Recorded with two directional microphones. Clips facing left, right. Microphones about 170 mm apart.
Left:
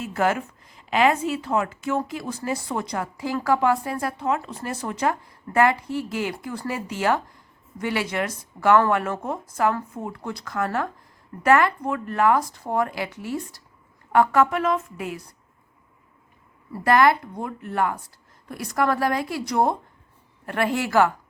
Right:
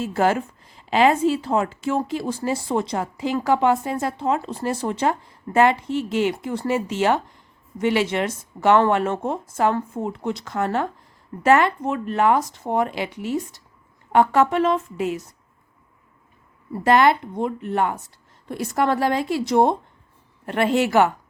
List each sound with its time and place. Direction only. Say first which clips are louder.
0.0 s a woman's voice: right 3 dB; 30° right (ahead or behind)
16.7 s a woman's voice: right 2 dB; 25° right (ahead or behind)